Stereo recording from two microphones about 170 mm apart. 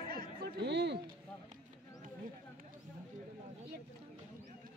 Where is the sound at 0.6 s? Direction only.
90° right.